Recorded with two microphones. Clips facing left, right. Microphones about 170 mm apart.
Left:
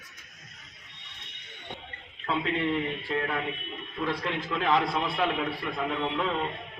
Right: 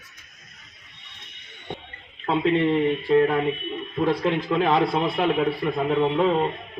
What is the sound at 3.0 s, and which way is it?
A man's voice, 45° right (ahead or behind).